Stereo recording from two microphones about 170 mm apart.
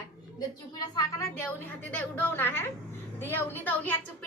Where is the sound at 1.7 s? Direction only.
10° left (ahead or behind).